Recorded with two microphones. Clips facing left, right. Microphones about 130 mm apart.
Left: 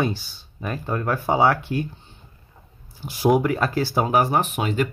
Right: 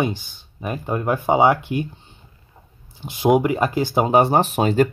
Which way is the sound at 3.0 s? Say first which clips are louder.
Right 2 dB; 20° right (ahead or behind).